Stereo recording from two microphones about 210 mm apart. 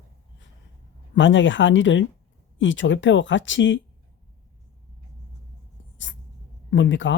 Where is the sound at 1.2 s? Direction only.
60° left (ahead or behind).